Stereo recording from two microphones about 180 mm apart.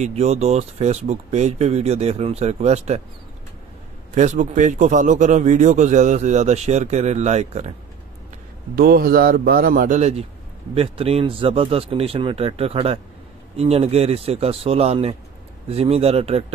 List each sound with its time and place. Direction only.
0.0 s a man's voice: 35° right (ahead or behind)
4.1 s a man's voice: 40° right (ahead or behind)
8.7 s a man's voice: 55° right (ahead or behind); by 16.5 s 35° right (ahead or behind)